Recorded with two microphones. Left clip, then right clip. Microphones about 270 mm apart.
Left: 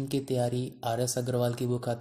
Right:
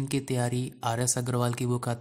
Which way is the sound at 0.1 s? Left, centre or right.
Right.